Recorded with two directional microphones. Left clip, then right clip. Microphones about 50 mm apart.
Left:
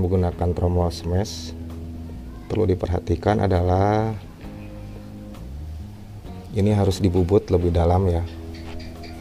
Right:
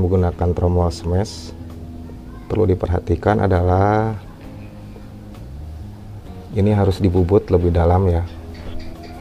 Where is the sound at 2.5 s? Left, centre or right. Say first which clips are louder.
Right 4 dB; left.